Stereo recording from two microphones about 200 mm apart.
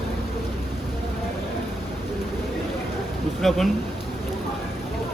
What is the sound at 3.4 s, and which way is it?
Speech, centre (ahead or behind).